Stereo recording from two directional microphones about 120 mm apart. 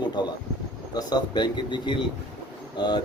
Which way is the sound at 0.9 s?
35° left (ahead or behind).